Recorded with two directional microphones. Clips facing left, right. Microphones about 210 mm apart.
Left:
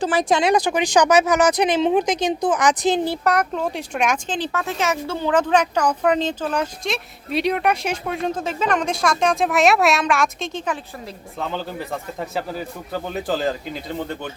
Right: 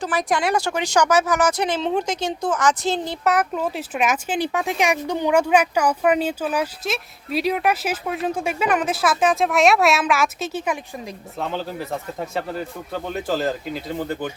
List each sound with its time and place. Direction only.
0.0 s speech: 30° left (ahead or behind); by 3.2 s 15° left (ahead or behind)
3.2 s speech: 5° right (ahead or behind)